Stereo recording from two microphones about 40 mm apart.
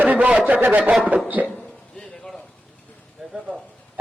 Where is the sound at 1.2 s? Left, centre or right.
Right.